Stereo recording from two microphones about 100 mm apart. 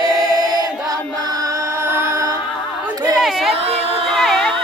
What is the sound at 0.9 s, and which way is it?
Music, 35° right (ahead or behind).